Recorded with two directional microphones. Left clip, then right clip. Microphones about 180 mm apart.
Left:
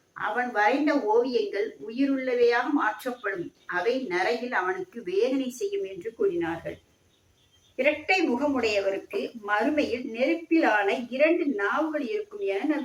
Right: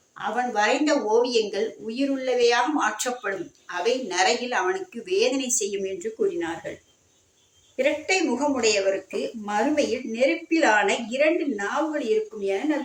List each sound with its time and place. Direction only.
0.2 s a woman's voice: 40° right (ahead or behind)
7.8 s a woman's voice: 40° right (ahead or behind)